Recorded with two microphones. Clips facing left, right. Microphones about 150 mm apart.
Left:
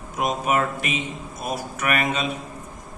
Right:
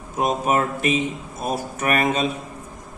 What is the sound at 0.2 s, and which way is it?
Speech, 35° right (ahead or behind).